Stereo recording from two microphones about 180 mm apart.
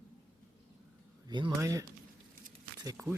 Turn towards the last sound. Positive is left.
turn(degrees=-15)  # may be behind; listen again after turning